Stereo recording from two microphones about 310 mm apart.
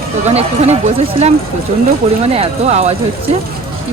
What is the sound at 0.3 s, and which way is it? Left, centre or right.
Speech, right.